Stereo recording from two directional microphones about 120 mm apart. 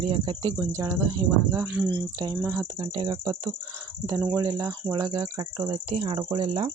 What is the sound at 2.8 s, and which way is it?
Speech, 40° right (ahead or behind).